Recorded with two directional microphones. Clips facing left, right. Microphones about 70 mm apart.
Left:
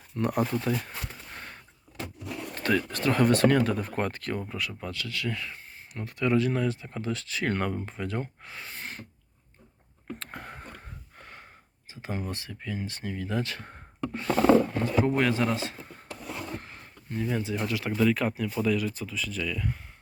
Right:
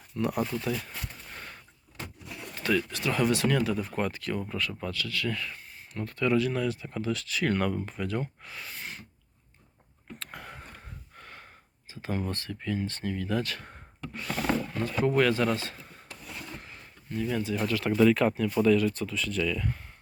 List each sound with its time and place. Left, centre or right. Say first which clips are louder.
0.2 s speech: left 2 dB; left
2.6 s speech: left 1 dB; left
4.4 s speech: right 1 dB; centre
4.8 s speech: right 2 dB; left
10.2 s a sound: left 2 dB; left
12.0 s speech: right 2 dB; centre
14.8 s speech: even; left
16.6 s a sound: left 2 dB; left
17.7 s speech: right 4 dB; centre